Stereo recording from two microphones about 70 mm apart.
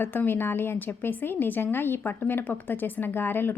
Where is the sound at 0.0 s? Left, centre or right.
Left.